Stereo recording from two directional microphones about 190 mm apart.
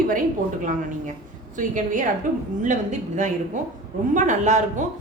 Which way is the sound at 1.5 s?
40° right (ahead or behind).